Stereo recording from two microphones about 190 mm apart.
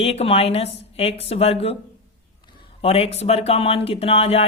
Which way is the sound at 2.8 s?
30° left (ahead or behind).